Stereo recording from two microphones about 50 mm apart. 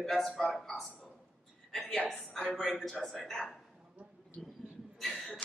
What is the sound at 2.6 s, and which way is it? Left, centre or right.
A woman's voice, centre.